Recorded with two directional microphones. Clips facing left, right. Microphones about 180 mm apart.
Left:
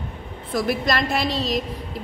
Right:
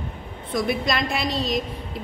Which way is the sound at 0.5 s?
Centre (ahead or behind).